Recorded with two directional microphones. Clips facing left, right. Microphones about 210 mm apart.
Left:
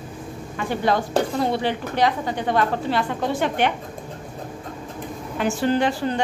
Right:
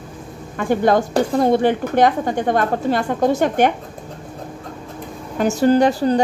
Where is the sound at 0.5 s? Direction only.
50° right (ahead or behind).